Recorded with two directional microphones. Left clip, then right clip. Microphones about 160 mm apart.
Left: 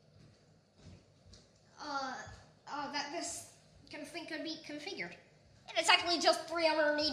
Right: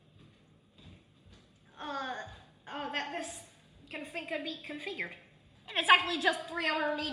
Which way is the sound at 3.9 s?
40° left (ahead or behind).